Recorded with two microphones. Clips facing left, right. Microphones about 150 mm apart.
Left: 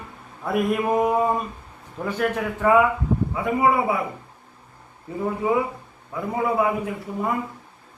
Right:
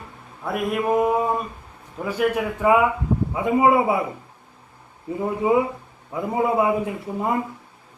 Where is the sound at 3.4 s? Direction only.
25° right (ahead or behind).